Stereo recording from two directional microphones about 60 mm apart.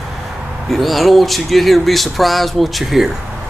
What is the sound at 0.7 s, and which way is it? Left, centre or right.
Speech, centre.